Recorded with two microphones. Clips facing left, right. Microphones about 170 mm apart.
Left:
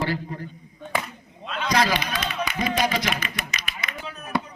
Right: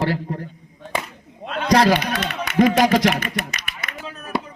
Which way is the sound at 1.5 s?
55° right (ahead or behind).